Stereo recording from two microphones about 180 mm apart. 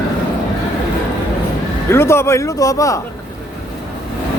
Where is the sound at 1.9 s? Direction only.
15° left (ahead or behind).